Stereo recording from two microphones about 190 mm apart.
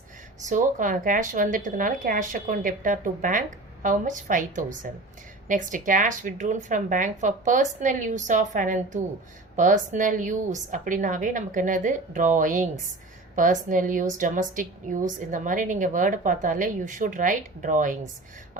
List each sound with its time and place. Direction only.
0.4 s a woman's voice: 45° right (ahead or behind)